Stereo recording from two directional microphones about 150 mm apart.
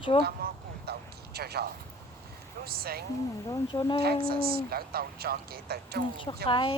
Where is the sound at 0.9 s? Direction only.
90° right.